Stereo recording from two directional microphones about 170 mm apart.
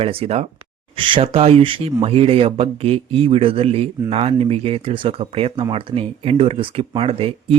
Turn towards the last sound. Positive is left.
turn(degrees=-35)  # may be behind; listen again after turning